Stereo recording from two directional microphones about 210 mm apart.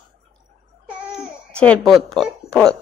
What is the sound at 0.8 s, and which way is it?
Speech, centre (ahead or behind).